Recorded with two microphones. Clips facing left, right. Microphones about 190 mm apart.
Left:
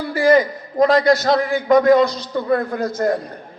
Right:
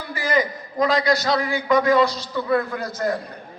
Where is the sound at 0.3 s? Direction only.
55° left (ahead or behind).